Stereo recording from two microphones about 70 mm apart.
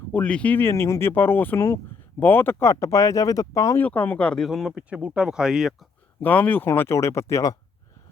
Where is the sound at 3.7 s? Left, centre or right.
Left.